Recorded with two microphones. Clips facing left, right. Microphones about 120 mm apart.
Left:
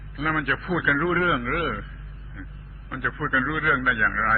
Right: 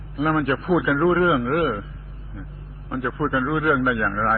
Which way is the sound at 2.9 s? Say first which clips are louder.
Right 5 dB; 30° right (ahead or behind).